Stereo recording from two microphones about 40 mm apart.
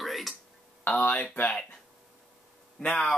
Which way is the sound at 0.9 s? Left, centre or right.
Left.